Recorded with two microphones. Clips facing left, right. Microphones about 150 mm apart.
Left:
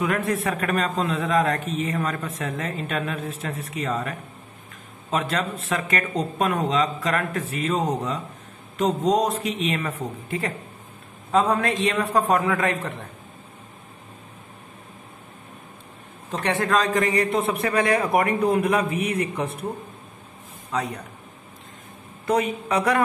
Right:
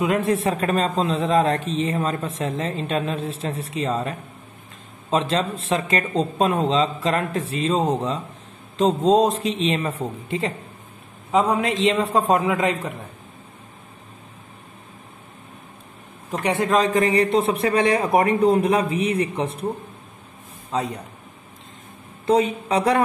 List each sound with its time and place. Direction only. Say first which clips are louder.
0.3 s a man's voice: right 3 dB; 25° right (ahead or behind)
16.3 s a man's voice: right 2 dB; 15° right (ahead or behind)
20.7 s a man's voice: right 2 dB; 25° right (ahead or behind)
22.2 s a man's voice: right 4 dB; 25° right (ahead or behind)